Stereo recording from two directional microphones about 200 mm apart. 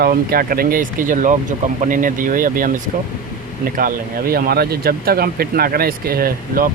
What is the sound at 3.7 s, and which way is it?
Speech, 45° right (ahead or behind).